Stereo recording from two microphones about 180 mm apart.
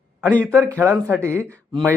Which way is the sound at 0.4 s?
10° right (ahead or behind).